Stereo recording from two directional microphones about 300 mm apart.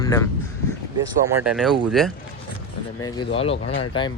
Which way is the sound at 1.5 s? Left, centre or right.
Centre.